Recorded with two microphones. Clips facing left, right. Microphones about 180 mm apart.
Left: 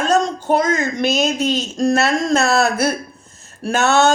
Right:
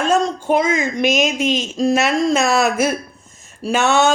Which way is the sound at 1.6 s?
5° right (ahead or behind).